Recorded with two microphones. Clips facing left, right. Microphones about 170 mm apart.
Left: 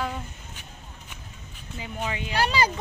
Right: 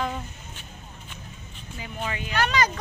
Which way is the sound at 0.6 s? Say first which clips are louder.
Right 1 dB; 15° left (ahead or behind).